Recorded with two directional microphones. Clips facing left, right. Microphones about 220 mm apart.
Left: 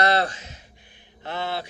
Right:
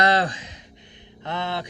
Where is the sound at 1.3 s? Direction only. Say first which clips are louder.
Right 1 dB; 20° right (ahead or behind).